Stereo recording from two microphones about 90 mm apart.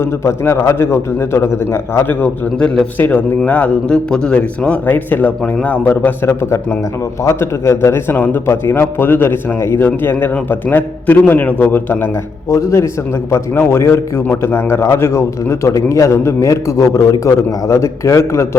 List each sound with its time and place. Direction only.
0.0 s a man's voice: 30° left (ahead or behind)
2.6 s a man's voice: 10° left (ahead or behind)
12.5 s a man's voice: 35° left (ahead or behind)